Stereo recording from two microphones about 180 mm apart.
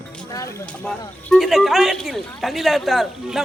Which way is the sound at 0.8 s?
5° left (ahead or behind).